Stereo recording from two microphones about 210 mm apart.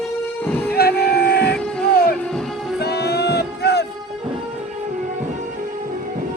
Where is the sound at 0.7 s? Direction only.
50° left (ahead or behind).